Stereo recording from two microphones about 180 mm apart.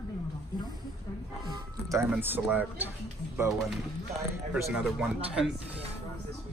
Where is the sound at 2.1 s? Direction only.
10° right (ahead or behind).